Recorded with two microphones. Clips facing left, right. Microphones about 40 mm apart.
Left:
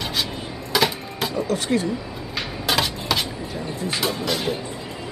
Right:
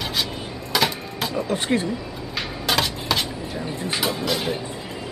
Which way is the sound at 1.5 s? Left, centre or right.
Right.